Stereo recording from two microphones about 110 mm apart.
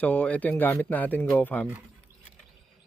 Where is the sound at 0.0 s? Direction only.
15° left (ahead or behind).